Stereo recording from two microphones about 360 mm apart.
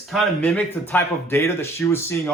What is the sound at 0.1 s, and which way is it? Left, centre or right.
Speech, centre.